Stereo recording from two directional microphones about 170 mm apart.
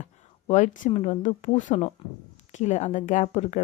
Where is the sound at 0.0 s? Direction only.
45° left (ahead or behind).